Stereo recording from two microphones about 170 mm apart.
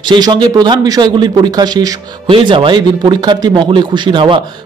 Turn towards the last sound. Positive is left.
turn(degrees=-30)  # may be behind; listen again after turning